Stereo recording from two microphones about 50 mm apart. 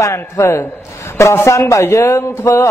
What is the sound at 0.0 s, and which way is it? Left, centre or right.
A man's voice, left.